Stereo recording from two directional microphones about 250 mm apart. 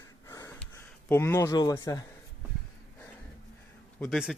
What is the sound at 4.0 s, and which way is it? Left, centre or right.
Speech, centre.